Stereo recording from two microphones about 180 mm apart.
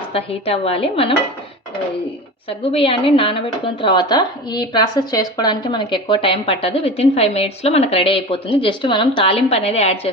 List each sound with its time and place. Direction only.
0.1 s a woman's voice: 35° left (ahead or behind)
2.5 s a woman's voice: 30° left (ahead or behind)